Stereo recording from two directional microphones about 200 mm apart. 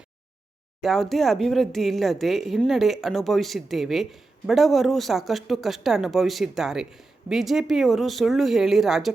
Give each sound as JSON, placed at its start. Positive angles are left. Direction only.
{"t": 0.8, "sound": "speech", "side_deg": 0}